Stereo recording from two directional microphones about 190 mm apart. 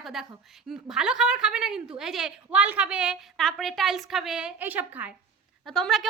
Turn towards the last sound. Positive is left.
turn(degrees=0)  # may be behind; listen again after turning